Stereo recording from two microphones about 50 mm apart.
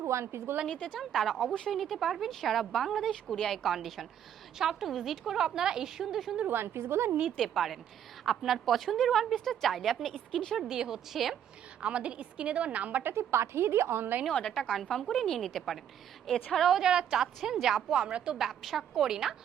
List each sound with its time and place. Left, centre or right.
0.0 s a woman's voice: right
0.7 s a woman's voice: left
0.9 s a woman's voice: centre
6.5 s a woman's voice: right
7.3 s a woman's voice: centre
10.7 s a woman's voice: centre
11.8 s a woman's voice: right
13.1 s a woman's voice: right
14.4 s a woman's voice: centre
16.8 s a woman's voice: centre
17.9 s a woman's voice: centre